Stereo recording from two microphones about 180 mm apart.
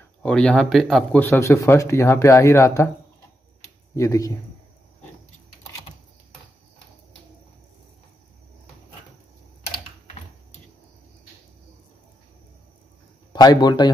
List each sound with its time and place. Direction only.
0.2 s speech: 5° left (ahead or behind)
3.9 s speech: 20° left (ahead or behind)
13.3 s a man's voice: 25° left (ahead or behind)